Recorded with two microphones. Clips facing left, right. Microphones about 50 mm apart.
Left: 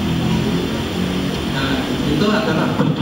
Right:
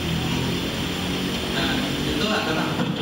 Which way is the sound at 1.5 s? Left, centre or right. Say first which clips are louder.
Left 3 dB; left.